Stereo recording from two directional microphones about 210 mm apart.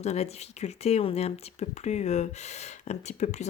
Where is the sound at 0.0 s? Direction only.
30° left (ahead or behind).